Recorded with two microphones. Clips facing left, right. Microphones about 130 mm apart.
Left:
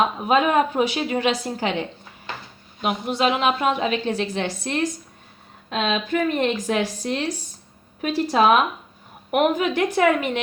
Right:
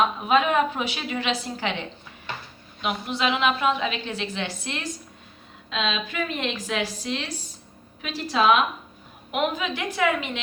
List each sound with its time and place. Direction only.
0.3 s a woman's voice: 40° left (ahead or behind)
2.8 s a woman's voice: 45° left (ahead or behind)